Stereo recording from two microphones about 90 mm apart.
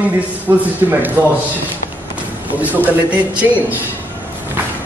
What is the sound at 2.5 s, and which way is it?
A man's voice, 20° right (ahead or behind).